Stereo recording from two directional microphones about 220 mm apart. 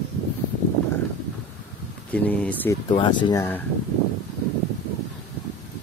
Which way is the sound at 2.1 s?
5° left (ahead or behind).